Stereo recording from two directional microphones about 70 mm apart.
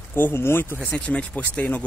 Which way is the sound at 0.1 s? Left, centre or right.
Left.